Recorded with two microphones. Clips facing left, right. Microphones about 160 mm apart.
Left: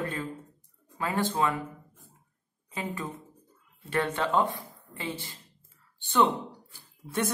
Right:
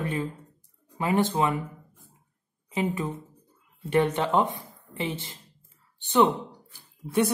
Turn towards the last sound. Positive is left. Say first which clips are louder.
# right 6 dB
turn(degrees=-15)  # may be behind; listen again after turning